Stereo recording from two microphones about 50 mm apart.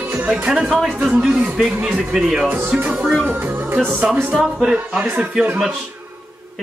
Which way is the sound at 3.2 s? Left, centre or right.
Right.